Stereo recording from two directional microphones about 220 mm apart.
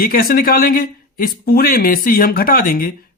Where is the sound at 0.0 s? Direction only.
40° left (ahead or behind).